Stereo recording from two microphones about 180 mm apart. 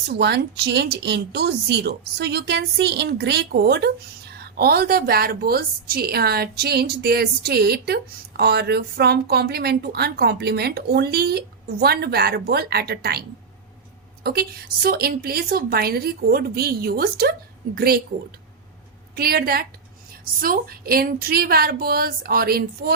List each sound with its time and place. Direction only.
0.1 s speech: 70° right (ahead or behind)
14.8 s speech: 60° right (ahead or behind)
19.1 s speech: 60° right (ahead or behind)